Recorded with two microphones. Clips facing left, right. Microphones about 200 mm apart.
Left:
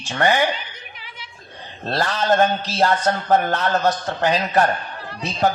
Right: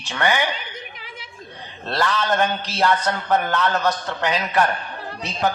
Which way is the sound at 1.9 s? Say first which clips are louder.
Left 2 dB; 40° left (ahead or behind).